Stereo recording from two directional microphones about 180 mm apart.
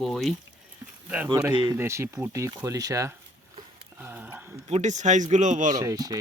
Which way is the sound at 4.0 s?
10° right (ahead or behind).